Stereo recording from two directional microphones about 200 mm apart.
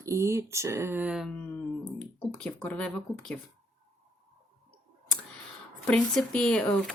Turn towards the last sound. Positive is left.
turn(degrees=5)  # may be behind; listen again after turning